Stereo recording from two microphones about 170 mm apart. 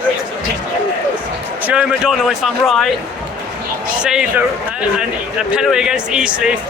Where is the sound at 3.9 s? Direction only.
5° right (ahead or behind).